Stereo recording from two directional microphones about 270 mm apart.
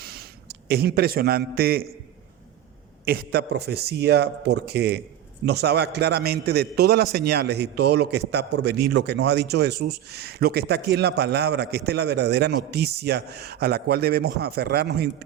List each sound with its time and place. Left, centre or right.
0.0 s a sound: right
0.7 s a man's voice: right
3.1 s a man's voice: right